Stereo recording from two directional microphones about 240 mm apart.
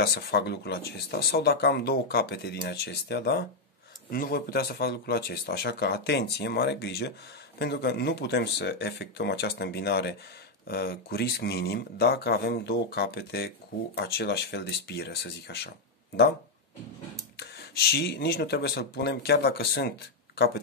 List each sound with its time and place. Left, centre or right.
0.0 s speech: left
17.4 s speech: left